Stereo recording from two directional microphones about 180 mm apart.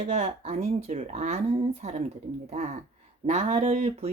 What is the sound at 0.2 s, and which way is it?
Speech, 40° right (ahead or behind).